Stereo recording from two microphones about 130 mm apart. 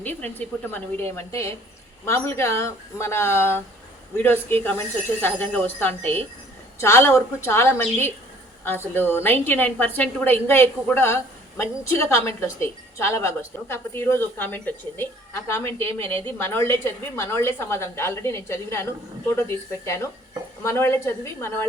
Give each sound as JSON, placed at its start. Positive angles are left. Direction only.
{"t": 0.0, "sound": "a woman's voice", "side_deg": 15}